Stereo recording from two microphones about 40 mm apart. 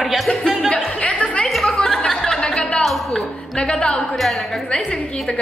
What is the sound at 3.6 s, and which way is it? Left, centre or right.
Speech, left.